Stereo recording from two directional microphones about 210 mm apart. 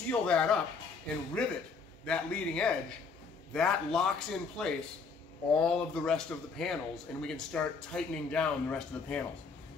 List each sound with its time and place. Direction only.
0.1 s a man's voice: 5° left (ahead or behind)